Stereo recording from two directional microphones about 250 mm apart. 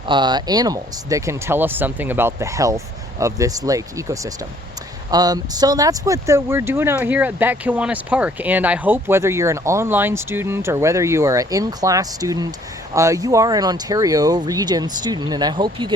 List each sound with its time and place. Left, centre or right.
0.1 s speech: centre